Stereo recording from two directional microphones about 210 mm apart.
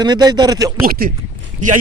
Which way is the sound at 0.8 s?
45° right (ahead or behind).